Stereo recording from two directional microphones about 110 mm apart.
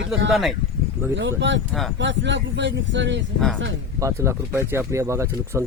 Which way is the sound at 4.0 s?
25° right (ahead or behind).